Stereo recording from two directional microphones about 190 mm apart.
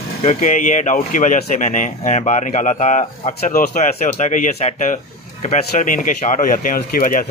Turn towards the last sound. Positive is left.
turn(degrees=45)  # may be behind; listen again after turning